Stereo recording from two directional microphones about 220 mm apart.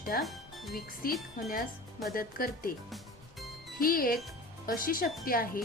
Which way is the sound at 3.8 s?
40° left (ahead or behind).